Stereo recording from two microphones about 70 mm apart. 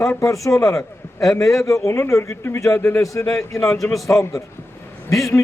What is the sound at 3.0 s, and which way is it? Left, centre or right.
Speech, left.